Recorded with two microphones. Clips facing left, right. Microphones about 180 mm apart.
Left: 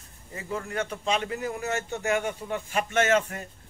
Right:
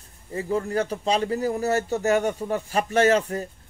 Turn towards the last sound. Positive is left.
turn(degrees=-35)  # may be behind; listen again after turning